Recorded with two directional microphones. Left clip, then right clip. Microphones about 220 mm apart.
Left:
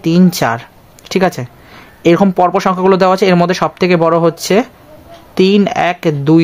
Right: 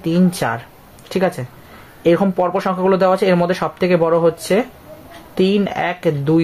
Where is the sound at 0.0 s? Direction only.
50° left (ahead or behind).